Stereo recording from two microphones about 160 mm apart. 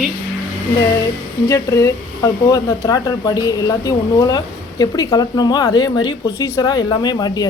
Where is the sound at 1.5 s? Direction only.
20° left (ahead or behind).